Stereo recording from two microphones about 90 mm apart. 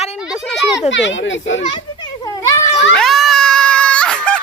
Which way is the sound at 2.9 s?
5° left (ahead or behind).